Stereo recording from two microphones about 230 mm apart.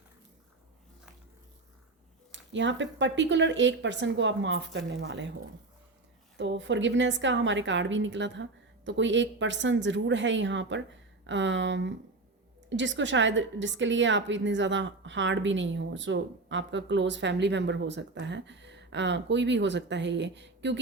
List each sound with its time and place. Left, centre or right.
2.3 s a woman's voice: right
6.3 s a woman's voice: right